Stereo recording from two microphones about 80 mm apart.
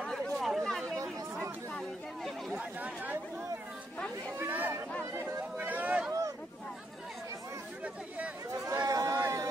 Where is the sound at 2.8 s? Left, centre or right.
Centre.